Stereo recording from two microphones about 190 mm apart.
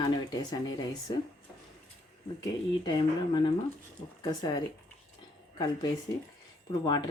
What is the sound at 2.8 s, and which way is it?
Speech, 25° left (ahead or behind).